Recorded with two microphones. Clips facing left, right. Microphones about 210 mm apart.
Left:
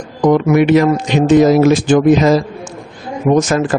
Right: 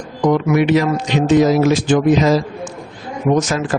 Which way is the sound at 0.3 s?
50° left (ahead or behind).